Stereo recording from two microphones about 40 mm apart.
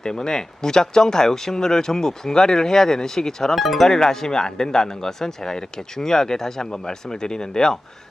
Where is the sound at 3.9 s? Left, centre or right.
Centre.